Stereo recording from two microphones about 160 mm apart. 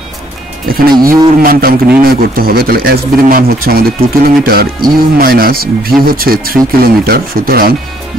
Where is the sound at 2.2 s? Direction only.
65° right (ahead or behind).